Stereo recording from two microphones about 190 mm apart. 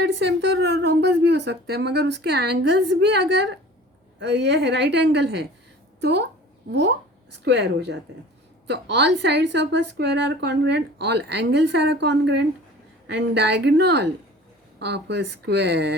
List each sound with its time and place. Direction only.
0.0 s a woman's voice: 65° right (ahead or behind)